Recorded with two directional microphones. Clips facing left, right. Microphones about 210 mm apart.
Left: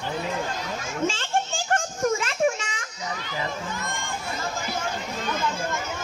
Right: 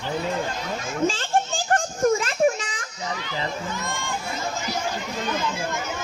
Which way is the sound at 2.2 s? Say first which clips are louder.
Right 3 dB; 35° right (ahead or behind).